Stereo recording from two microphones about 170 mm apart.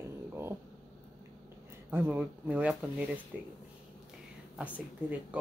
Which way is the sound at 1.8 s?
10° right (ahead or behind).